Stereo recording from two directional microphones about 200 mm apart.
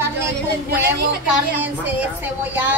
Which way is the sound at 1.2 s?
10° right (ahead or behind).